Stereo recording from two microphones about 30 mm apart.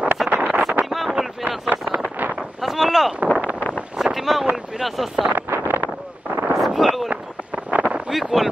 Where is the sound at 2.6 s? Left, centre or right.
Centre.